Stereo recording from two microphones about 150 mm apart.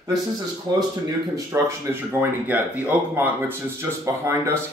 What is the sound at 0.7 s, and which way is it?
Speech, 25° right (ahead or behind).